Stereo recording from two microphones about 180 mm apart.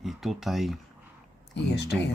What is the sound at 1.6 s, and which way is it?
Speech, 70° left (ahead or behind).